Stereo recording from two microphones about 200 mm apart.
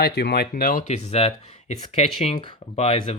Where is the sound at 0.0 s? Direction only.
50° left (ahead or behind).